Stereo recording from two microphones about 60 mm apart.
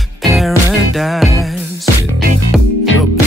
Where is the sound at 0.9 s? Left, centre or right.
Centre.